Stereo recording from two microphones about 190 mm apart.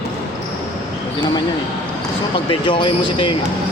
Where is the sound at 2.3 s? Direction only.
25° left (ahead or behind).